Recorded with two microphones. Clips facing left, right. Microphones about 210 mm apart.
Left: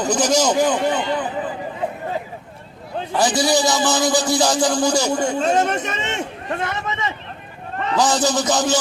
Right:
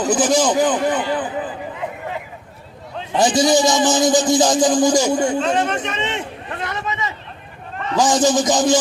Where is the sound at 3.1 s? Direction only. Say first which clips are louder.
Right 3 dB; 20° right (ahead or behind).